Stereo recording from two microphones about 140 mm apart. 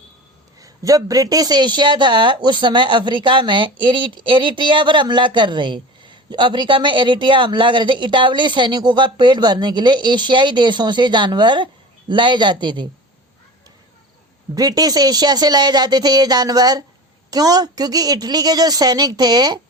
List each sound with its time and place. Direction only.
0.6 s speech: 25° right (ahead or behind)
14.5 s speech: 30° right (ahead or behind)